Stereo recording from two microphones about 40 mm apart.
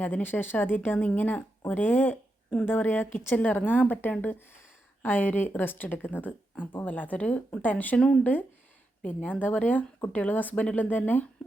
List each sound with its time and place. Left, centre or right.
0.0 s a woman's voice: left
1.0 s a woman's voice: left
3.3 s speech: left
7.9 s speech: left
8.2 s speech: left